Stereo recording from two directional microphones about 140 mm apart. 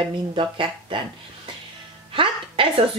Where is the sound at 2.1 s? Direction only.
40° right (ahead or behind).